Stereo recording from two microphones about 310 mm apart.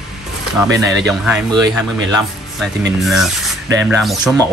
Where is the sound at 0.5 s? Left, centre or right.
Centre.